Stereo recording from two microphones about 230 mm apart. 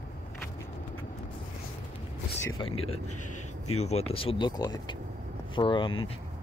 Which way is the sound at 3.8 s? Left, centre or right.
Left.